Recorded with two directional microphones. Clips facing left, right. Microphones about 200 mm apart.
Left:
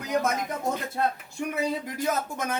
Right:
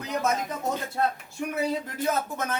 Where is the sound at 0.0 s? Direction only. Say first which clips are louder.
Left 3 dB; 10° left (ahead or behind).